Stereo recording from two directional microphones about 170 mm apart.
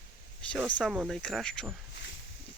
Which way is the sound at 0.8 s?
Centre (ahead or behind).